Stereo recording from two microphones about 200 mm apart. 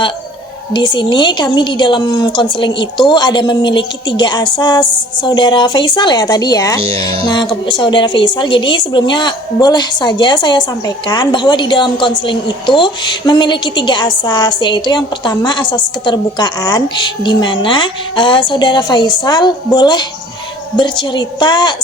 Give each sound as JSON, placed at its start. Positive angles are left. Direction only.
{"t": 0.7, "sound": "a woman's voice", "side_deg": 20}